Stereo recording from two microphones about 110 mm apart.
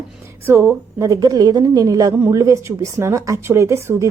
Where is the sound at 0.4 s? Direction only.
20° right (ahead or behind).